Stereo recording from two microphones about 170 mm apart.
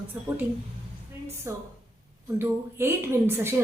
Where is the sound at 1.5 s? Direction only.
15° right (ahead or behind).